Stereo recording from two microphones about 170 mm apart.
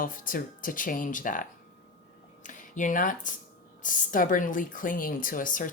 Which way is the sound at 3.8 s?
50° left (ahead or behind).